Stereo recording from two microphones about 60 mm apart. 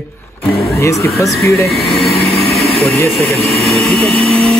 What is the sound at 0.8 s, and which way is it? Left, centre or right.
Speech, left.